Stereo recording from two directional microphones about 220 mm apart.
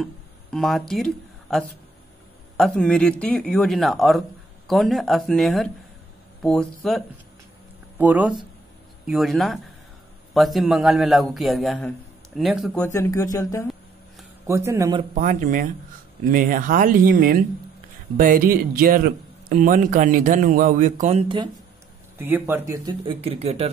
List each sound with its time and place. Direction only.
0.0 s speech: centre (ahead or behind)
8.0 s a man's voice: 5° right (ahead or behind)
12.8 s speech: 10° left (ahead or behind)
14.5 s a man's voice: 15° right (ahead or behind)
15.1 s speech: 35° right (ahead or behind)
22.2 s speech: 10° right (ahead or behind); by 23.7 s 30° right (ahead or behind)